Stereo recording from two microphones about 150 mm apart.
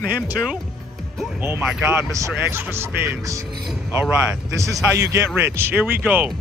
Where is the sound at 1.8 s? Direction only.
15° right (ahead or behind).